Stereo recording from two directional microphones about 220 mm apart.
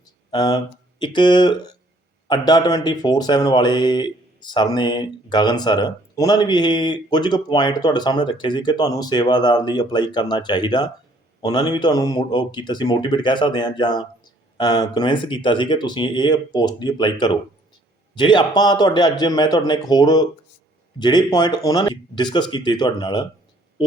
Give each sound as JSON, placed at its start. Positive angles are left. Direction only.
{"t": 0.3, "sound": "speech", "side_deg": 15}